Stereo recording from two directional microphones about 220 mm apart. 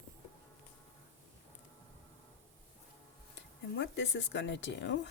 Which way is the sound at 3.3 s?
50° left (ahead or behind).